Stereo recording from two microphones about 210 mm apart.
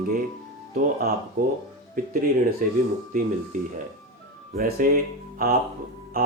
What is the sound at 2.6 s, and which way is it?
Speech, 40° right (ahead or behind).